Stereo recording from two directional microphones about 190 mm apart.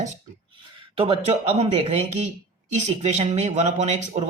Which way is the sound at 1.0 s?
30° right (ahead or behind).